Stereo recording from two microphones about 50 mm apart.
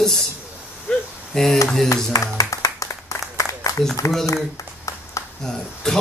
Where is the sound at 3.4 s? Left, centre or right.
Left.